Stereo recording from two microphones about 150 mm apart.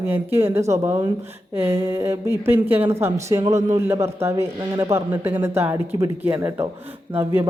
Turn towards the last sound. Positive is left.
turn(degrees=-15)  # may be behind; listen again after turning